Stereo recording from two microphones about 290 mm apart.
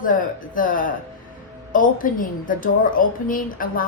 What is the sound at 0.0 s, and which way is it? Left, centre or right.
A woman's voice, left.